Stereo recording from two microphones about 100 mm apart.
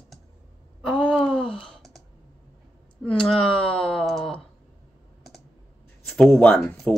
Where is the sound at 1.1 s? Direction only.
5° left (ahead or behind).